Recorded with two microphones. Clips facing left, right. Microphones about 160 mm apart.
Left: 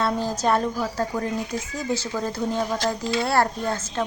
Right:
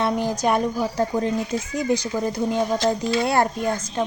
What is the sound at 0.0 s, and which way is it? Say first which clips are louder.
Speech: right 2 dB; 15° right (ahead or behind).